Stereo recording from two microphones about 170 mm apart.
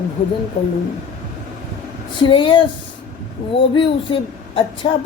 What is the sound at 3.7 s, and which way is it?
Speech, 30° left (ahead or behind).